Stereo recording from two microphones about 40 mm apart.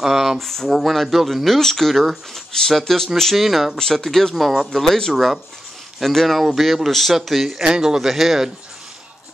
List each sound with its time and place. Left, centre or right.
0.0 s speech: centre
0.4 s speech: centre
3.3 s speech: centre
3.7 s speech: centre
5.1 s speech: centre
7.6 s speech: centre